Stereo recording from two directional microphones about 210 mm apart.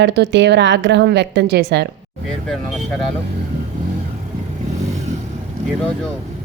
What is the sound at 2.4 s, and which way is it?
Speech, centre (ahead or behind).